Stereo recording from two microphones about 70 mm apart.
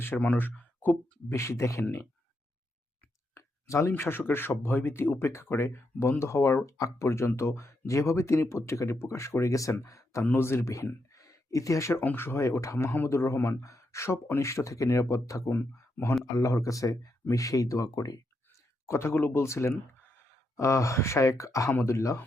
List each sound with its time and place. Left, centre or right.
0.2 s speech: left
1.3 s speech: left
1.8 s speech: left
3.3 s a sound: left
3.9 s speech: left
10.2 s speech: left
11.1 s a sound: left
11.9 s speech: left
15.4 s speech: left
16.3 s speech: left
18.9 s speech: left
20.6 s speech: left